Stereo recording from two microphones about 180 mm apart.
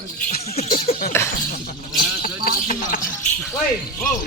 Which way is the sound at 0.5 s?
35° left (ahead or behind).